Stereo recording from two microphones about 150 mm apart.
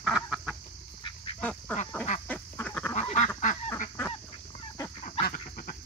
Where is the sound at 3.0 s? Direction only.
50° left (ahead or behind).